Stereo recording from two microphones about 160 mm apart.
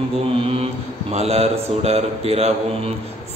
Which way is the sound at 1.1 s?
40° right (ahead or behind).